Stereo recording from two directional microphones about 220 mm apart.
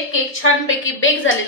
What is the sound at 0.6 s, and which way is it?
Speech, 60° left (ahead or behind).